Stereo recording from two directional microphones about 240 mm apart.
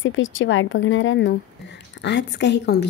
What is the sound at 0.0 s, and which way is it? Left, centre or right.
Speech, left.